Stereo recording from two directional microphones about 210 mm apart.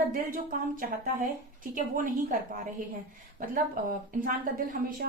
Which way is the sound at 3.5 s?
45° right (ahead or behind).